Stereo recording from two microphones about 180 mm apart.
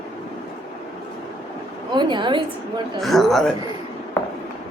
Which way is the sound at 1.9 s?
25° right (ahead or behind).